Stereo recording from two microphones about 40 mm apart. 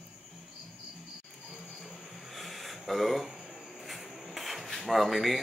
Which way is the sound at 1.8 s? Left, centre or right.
Centre.